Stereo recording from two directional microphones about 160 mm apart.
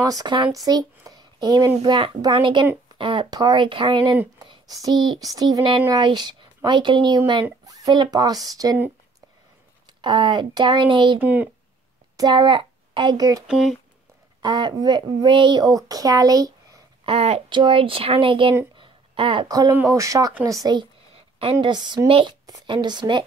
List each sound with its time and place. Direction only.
0.0 s speech: 25° right (ahead or behind)
10.0 s speech: 30° right (ahead or behind)
11.1 s speech: 10° right (ahead or behind)
12.2 s a woman's voice: 25° right (ahead or behind)
13.5 s speech: centre (ahead or behind)
14.4 s speech: 25° right (ahead or behind)
17.0 s speech: 40° right (ahead or behind)
18.8 s a sound: 35° right (ahead or behind)
19.7 s a woman's voice: 15° right (ahead or behind)